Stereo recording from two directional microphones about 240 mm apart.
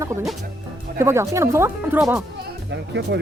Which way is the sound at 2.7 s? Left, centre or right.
Right.